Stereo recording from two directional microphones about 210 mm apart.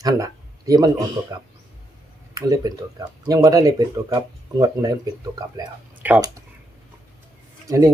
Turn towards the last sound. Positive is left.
turn(degrees=-15)  # may be behind; listen again after turning